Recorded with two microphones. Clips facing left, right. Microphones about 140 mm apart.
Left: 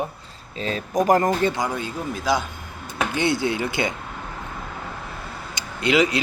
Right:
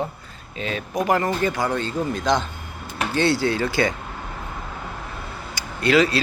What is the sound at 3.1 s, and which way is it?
Speech, 20° left (ahead or behind).